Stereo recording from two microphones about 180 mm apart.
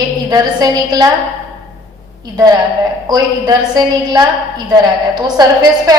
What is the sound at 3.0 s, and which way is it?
A woman's voice, 20° right (ahead or behind).